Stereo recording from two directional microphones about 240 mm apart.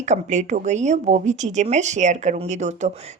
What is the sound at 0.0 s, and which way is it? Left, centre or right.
Speech, right.